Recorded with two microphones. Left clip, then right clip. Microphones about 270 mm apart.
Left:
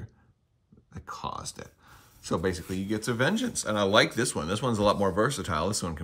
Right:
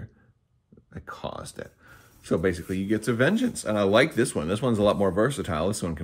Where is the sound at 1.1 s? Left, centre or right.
Centre.